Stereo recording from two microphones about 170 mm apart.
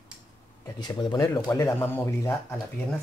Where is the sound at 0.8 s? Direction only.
25° left (ahead or behind).